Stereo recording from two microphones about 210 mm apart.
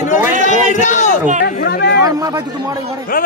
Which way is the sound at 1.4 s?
50° left (ahead or behind).